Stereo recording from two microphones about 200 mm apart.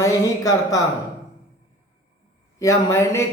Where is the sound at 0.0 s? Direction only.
15° left (ahead or behind).